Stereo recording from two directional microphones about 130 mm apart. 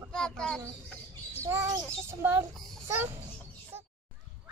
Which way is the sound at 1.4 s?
20° right (ahead or behind).